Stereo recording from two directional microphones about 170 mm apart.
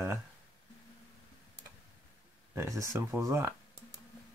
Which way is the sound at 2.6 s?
15° right (ahead or behind).